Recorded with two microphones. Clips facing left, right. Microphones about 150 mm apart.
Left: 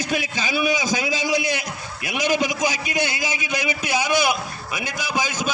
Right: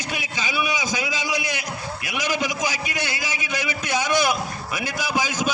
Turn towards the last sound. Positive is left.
turn(degrees=-10)  # may be behind; listen again after turning